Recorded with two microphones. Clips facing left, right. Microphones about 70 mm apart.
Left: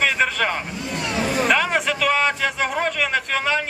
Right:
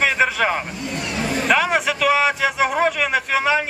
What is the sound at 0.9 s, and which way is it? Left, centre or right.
Vehicle, centre.